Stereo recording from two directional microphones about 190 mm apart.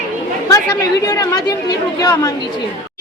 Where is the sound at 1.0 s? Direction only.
20° left (ahead or behind).